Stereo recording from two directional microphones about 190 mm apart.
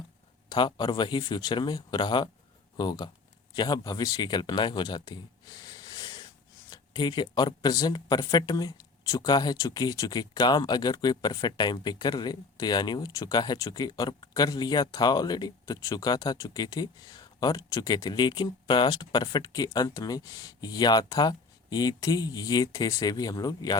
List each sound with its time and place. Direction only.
0.5 s speech: 25° left (ahead or behind)